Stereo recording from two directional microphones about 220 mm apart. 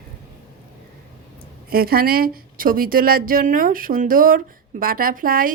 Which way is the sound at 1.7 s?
45° right (ahead or behind).